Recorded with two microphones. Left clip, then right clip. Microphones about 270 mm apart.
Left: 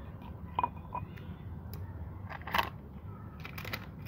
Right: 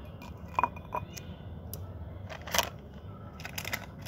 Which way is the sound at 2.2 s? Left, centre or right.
Centre.